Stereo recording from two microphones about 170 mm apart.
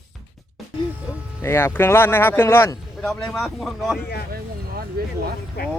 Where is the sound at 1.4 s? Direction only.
15° left (ahead or behind).